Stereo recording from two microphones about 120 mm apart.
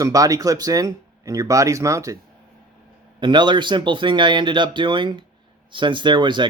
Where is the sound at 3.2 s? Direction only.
40° right (ahead or behind).